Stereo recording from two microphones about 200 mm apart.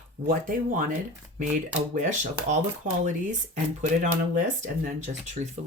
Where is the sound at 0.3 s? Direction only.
40° right (ahead or behind).